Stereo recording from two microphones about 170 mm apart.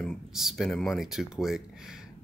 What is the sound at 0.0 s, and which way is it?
Speech, centre (ahead or behind).